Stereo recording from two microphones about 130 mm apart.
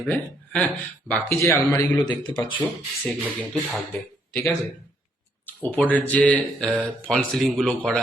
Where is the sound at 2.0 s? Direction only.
35° left (ahead or behind).